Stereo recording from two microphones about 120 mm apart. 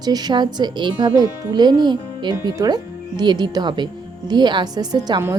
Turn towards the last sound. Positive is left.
turn(degrees=-35)  # may be behind; listen again after turning